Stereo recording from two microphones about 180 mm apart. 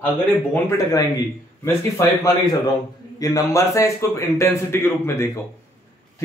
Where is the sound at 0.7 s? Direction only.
20° left (ahead or behind).